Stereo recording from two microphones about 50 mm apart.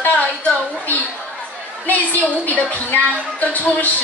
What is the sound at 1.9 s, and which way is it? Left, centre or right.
A woman's voice, left.